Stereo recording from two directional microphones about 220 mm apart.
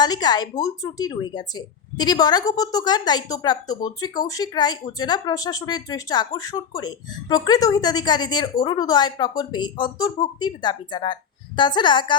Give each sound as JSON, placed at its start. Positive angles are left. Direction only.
{"t": 0.0, "sound": "speech", "side_deg": 20}